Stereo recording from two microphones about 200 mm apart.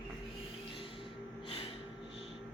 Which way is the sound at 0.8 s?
25° left (ahead or behind).